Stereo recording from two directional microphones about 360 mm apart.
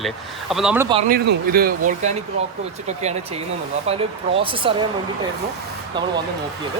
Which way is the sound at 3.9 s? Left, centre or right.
Centre.